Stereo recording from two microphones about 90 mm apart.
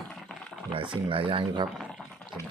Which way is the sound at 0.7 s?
75° right (ahead or behind).